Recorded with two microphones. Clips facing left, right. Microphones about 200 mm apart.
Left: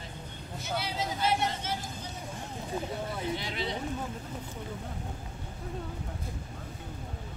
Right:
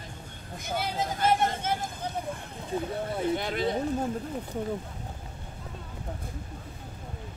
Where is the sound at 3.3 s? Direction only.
50° right (ahead or behind).